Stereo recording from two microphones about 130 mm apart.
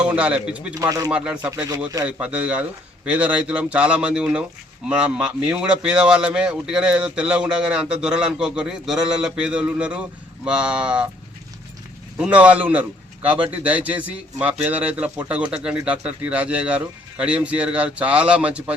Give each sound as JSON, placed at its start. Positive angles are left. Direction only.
{"t": 0.0, "sound": "speech", "side_deg": -10}
{"t": 0.7, "sound": "speech", "side_deg": -25}
{"t": 1.1, "sound": "speech", "side_deg": -10}
{"t": 12.1, "sound": "speech", "side_deg": -10}